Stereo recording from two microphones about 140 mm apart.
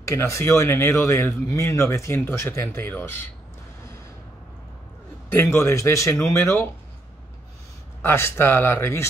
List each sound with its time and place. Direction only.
0.0 s speech: 20° left (ahead or behind)
5.3 s speech: 20° left (ahead or behind)
8.0 s speech: 15° left (ahead or behind)